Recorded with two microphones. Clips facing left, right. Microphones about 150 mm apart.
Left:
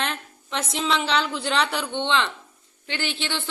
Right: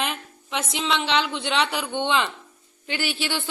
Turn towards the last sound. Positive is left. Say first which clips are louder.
# right 2 dB
turn(degrees=-10)  # may be behind; listen again after turning